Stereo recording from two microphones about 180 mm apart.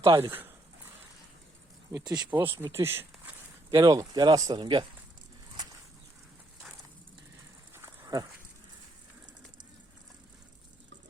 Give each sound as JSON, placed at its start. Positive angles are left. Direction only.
{"t": 0.0, "sound": "speech", "side_deg": -15}
{"t": 1.9, "sound": "speech", "side_deg": -20}
{"t": 7.7, "sound": "a sound", "side_deg": -15}